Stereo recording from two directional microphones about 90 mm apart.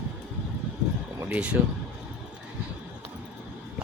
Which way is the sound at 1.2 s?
15° right (ahead or behind).